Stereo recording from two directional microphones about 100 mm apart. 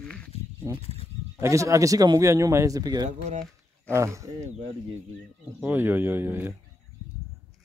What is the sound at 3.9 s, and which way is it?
Speech, 30° right (ahead or behind).